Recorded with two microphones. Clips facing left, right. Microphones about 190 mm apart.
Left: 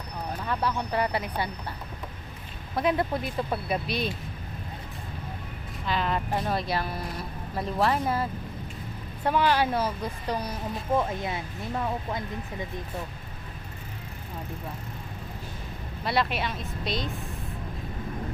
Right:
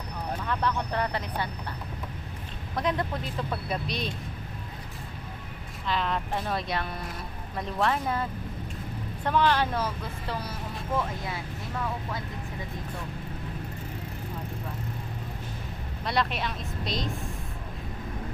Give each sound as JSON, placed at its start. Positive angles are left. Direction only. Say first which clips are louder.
{"t": 0.4, "sound": "speech", "louder": "left 1 dB", "side_deg": 10}
{"t": 2.7, "sound": "speech", "louder": "left 3 dB", "side_deg": 5}
{"t": 5.8, "sound": "speech", "louder": "left 1 dB", "side_deg": 5}
{"t": 16.0, "sound": "speech", "louder": "left 2 dB", "side_deg": 5}